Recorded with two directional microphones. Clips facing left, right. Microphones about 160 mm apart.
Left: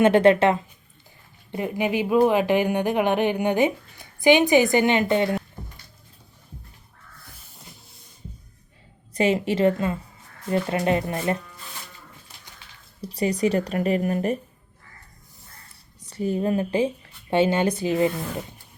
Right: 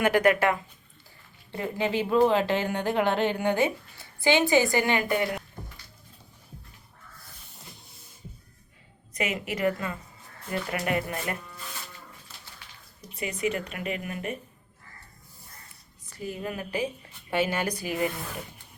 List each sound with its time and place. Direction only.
0.0 s speech: 25° left (ahead or behind)
9.1 s speech: 30° left (ahead or behind)
13.0 s speech: 35° left (ahead or behind)
16.0 s speech: 30° left (ahead or behind)